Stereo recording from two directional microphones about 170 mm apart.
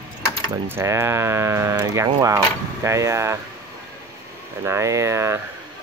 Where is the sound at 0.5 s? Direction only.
15° right (ahead or behind).